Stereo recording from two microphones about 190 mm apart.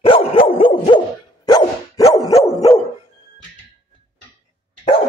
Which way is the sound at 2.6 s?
35° left (ahead or behind).